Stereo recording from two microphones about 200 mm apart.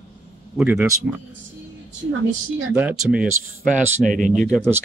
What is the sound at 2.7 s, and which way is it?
Speech, 5° right (ahead or behind).